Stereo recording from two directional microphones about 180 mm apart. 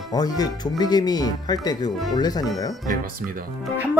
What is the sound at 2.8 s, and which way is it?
Speech, 50° right (ahead or behind).